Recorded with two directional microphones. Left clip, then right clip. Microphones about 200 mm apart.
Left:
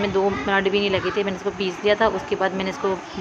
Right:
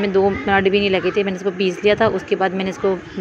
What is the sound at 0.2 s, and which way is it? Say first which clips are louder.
Speech: right 5 dB; 20° right (ahead or behind).